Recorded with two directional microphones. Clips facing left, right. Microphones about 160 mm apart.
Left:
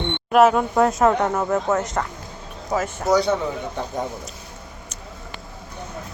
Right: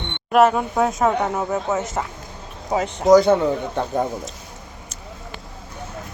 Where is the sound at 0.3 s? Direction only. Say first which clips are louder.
Even; centre (ahead or behind).